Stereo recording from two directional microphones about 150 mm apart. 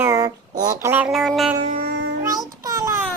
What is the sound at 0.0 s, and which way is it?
Child singing, 25° right (ahead or behind).